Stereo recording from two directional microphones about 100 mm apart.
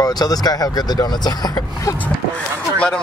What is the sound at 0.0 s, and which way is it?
Speech, 40° left (ahead or behind).